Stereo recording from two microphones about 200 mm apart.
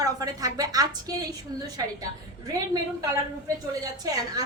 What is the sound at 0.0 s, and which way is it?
A woman's voice, 20° right (ahead or behind).